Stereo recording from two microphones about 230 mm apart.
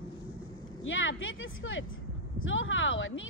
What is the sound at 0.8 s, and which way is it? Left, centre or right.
Speech, left.